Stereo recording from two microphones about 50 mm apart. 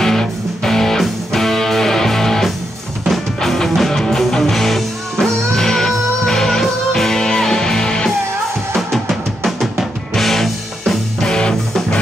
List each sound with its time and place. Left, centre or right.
0.0 s music: centre
8.7 s drum: centre
11.2 s music: centre